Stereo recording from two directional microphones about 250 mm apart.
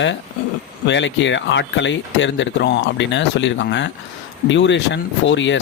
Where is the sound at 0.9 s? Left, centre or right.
Left.